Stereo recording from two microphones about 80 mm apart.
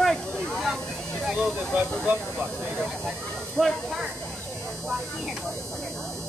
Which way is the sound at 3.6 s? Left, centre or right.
Centre.